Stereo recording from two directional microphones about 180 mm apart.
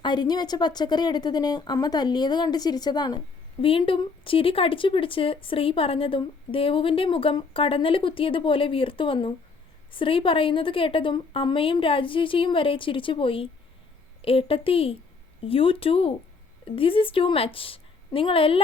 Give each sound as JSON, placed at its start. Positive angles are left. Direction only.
{"t": 0.0, "sound": "speech", "side_deg": 25}